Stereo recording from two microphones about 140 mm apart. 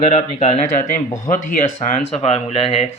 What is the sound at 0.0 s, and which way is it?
Speech, 50° left (ahead or behind).